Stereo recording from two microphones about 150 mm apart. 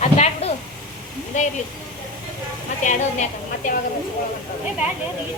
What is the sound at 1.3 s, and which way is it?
Speech, 55° left (ahead or behind).